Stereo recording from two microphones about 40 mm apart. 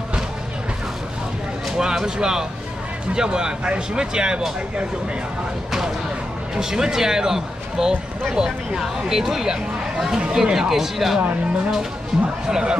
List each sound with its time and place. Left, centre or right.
1.8 s speech: centre
6.5 s speech: centre
11.1 s speech: right
12.4 s speech: centre